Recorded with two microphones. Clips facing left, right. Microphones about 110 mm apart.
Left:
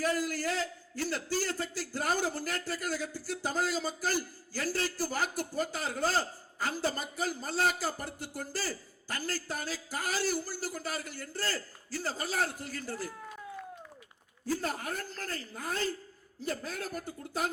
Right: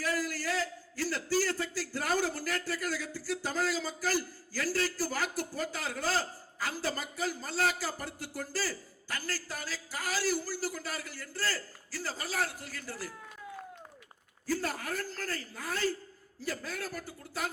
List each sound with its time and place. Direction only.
0.0 s a man's voice: 25° left (ahead or behind)
14.4 s a man's voice: 25° left (ahead or behind)